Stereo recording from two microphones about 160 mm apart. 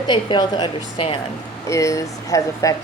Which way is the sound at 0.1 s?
30° left (ahead or behind).